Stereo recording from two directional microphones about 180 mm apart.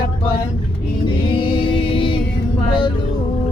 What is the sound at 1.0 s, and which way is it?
Music, 25° left (ahead or behind).